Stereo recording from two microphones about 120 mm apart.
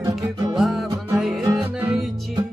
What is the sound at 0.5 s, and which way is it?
Music, centre (ahead or behind).